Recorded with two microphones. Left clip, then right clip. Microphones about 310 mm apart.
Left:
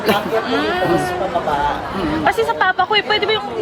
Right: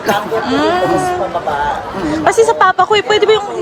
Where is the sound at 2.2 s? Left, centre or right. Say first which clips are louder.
Right 7 dB; right.